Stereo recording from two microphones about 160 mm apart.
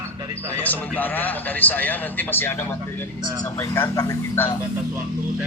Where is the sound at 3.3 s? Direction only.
25° left (ahead or behind).